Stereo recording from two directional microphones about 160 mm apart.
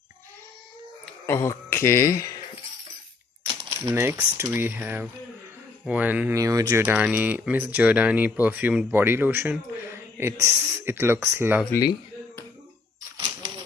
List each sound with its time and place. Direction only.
1.2 s speech: 15° left (ahead or behind)
3.4 s speech: 15° right (ahead or behind)